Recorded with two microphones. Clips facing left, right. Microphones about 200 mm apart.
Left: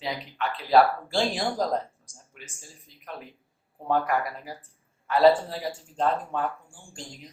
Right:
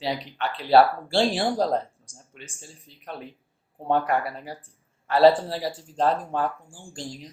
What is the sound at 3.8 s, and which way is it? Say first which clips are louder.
Speech: right 2 dB; 30° right (ahead or behind).